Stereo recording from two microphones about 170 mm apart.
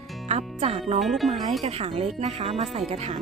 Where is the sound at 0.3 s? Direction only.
35° right (ahead or behind).